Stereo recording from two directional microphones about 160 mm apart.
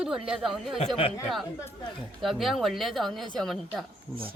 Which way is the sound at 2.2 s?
Centre (ahead or behind).